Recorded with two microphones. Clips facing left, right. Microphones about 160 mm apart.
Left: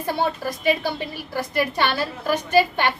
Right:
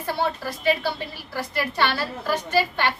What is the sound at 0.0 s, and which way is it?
A woman's voice, 15° left (ahead or behind).